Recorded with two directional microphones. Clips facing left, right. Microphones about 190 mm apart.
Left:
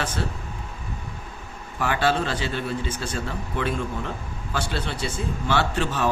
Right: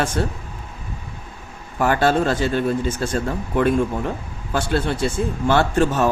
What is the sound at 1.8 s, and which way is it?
Speech, 45° right (ahead or behind).